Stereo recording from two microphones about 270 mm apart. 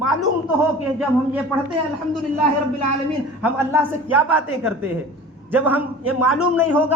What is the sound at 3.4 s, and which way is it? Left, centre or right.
A woman's voice, centre.